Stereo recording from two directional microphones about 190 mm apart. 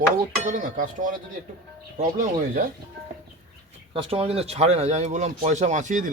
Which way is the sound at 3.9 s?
30° right (ahead or behind).